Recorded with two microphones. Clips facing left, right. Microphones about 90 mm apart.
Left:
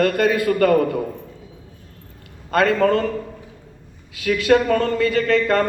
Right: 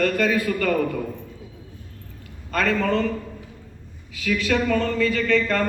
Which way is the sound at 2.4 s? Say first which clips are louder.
Left 6 dB; 50° left (ahead or behind).